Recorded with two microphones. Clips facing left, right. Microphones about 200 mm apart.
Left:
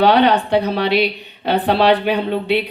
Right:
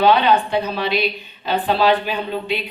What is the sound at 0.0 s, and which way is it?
A woman's voice, 70° left (ahead or behind).